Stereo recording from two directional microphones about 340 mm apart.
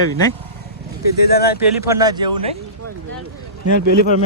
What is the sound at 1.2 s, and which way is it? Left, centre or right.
Speech, left.